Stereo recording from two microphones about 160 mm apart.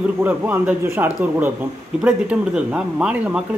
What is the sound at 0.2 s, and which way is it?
A man's voice, 10° right (ahead or behind).